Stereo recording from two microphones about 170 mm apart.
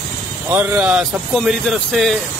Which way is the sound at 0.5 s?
10° right (ahead or behind).